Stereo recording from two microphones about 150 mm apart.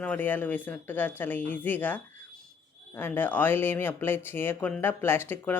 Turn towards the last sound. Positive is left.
turn(degrees=15)  # may be behind; listen again after turning